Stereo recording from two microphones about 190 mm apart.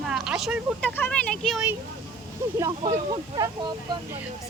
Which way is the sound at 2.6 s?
15° right (ahead or behind).